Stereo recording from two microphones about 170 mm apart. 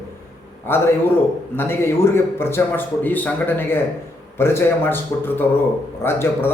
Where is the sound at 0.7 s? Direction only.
15° left (ahead or behind).